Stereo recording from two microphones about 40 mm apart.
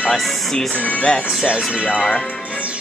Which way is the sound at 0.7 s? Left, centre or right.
Left.